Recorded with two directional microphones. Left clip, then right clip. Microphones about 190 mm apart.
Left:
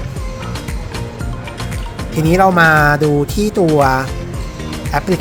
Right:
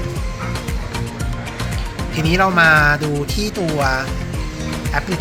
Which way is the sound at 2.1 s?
50° left (ahead or behind).